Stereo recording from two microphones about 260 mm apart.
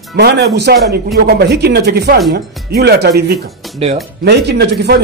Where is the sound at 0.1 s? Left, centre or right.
Right.